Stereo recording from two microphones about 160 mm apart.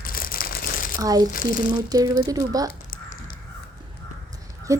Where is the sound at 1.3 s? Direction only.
60° left (ahead or behind).